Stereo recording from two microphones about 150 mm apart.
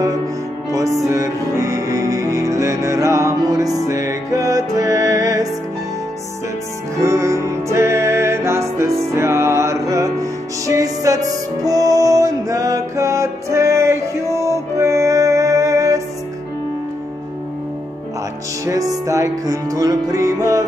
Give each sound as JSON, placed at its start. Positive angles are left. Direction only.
{"t": 0.7, "sound": "music", "side_deg": -20}
{"t": 7.0, "sound": "music", "side_deg": -20}
{"t": 18.7, "sound": "music", "side_deg": -20}